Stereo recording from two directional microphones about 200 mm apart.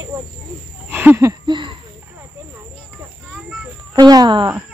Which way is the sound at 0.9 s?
10° right (ahead or behind).